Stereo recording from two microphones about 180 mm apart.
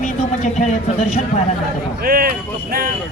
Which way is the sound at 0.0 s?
40° left (ahead or behind).